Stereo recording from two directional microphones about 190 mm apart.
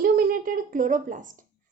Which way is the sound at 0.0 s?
50° right (ahead or behind).